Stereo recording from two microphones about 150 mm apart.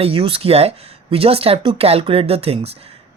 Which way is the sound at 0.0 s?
40° right (ahead or behind).